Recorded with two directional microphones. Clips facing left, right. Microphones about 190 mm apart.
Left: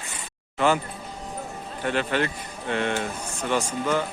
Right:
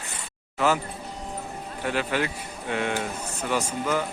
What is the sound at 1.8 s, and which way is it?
Speech, 5° right (ahead or behind).